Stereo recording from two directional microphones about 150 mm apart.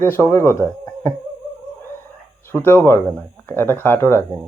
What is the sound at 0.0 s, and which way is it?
Speech, 15° left (ahead or behind).